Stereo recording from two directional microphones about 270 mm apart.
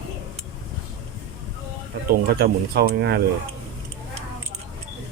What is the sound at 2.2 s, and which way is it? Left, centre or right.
Speech, right.